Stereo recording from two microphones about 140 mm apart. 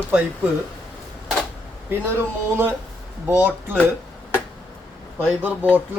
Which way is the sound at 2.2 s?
15° right (ahead or behind).